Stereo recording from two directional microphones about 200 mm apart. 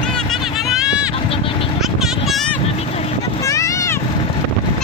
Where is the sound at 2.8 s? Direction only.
30° left (ahead or behind).